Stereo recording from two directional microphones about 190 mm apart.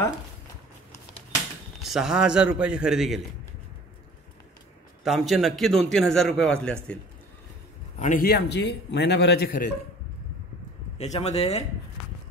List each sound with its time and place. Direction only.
1.8 s a man's voice: centre (ahead or behind)
5.0 s a man's voice: centre (ahead or behind)
8.0 s a man's voice: 45° left (ahead or behind)
11.0 s speech: 35° left (ahead or behind)